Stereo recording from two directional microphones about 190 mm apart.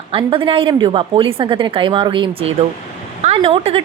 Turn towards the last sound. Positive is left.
turn(degrees=-30)  # may be behind; listen again after turning